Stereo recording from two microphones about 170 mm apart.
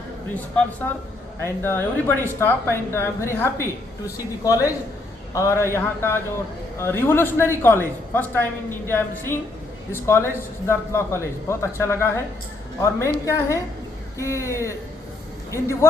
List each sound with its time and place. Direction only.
1.4 s a man's voice: 15° left (ahead or behind)